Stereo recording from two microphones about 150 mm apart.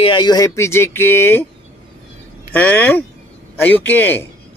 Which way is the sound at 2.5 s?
10° left (ahead or behind).